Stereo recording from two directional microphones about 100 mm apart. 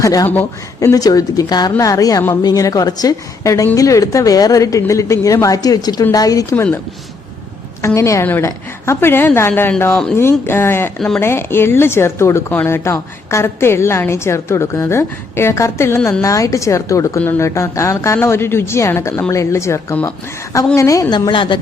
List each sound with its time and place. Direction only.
0.0 s speech: 35° left (ahead or behind)
7.8 s speech: 30° left (ahead or behind)
21.2 s speech: 55° left (ahead or behind)